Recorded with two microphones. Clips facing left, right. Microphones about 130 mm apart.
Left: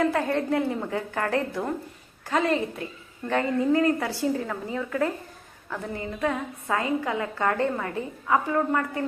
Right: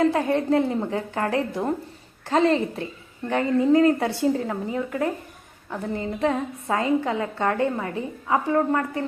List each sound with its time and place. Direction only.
0.1 s a woman's voice: 20° right (ahead or behind)
2.2 s a woman's voice: 30° right (ahead or behind)